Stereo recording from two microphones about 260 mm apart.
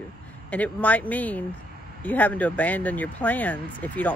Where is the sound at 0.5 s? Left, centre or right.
Centre.